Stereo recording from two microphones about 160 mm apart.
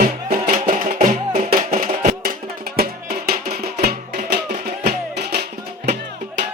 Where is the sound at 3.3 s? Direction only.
70° right (ahead or behind); by 6.0 s 90° right.